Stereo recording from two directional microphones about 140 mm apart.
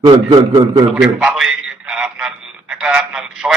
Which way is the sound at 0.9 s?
5° right (ahead or behind).